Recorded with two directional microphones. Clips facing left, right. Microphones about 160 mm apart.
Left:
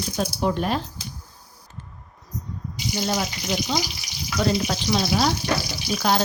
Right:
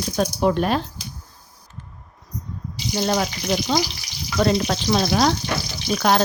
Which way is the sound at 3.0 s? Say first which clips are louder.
Right 5 dB; 60° right (ahead or behind).